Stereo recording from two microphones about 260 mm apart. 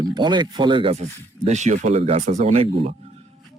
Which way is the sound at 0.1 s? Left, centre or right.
Centre.